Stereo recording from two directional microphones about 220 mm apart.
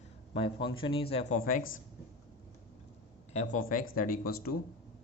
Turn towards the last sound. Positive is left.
turn(degrees=45)  # may be behind; listen again after turning